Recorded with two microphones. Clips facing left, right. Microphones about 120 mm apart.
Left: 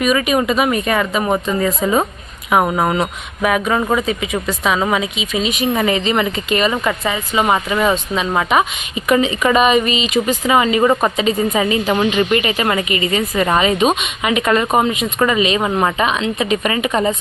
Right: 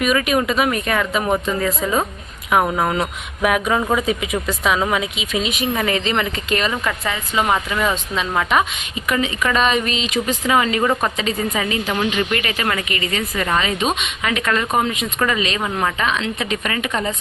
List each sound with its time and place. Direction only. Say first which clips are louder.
0.0 s speech: left 2 dB; centre (ahead or behind)
9.0 s speech: left 6 dB; 20° left (ahead or behind)
15.6 s speech: left 5 dB; 25° left (ahead or behind)
16.0 s speech: left 4 dB; 10° left (ahead or behind)